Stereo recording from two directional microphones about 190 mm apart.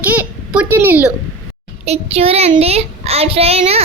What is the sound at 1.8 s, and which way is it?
Child singing, 35° right (ahead or behind).